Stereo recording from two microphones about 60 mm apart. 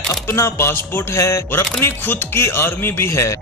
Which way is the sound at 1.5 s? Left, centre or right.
Left.